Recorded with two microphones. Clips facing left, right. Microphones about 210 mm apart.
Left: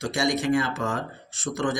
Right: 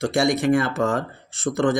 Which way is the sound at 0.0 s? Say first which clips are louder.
Right 5 dB; 55° right (ahead or behind).